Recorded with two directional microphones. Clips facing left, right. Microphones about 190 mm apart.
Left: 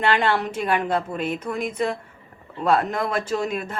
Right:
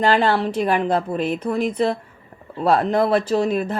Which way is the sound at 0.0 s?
35° right (ahead or behind).